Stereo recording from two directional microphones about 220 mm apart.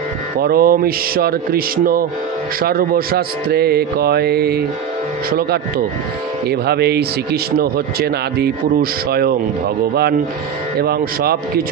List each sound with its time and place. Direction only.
0.4 s speech: 40° right (ahead or behind)
10.8 s speech: 45° right (ahead or behind)